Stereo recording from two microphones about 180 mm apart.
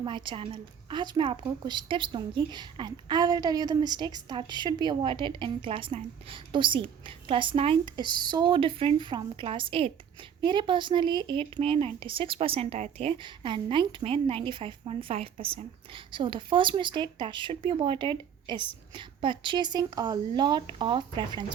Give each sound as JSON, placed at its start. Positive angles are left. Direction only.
{"t": 0.0, "sound": "a woman's voice", "side_deg": -25}